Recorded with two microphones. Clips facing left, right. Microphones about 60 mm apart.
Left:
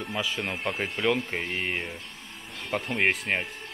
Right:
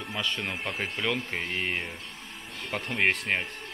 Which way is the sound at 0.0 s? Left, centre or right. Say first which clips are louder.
Left 2 dB; centre.